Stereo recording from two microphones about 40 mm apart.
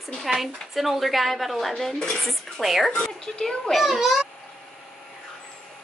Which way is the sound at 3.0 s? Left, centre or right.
Centre.